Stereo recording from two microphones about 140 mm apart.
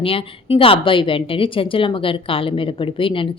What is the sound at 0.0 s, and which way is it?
Speech, 40° left (ahead or behind).